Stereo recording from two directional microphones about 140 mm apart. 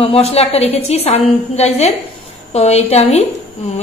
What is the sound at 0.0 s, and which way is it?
A woman's voice, 45° left (ahead or behind).